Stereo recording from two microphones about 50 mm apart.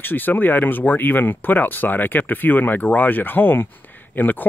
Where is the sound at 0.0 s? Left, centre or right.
Left.